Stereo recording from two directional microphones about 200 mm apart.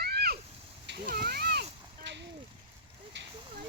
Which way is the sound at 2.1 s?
60° right (ahead or behind).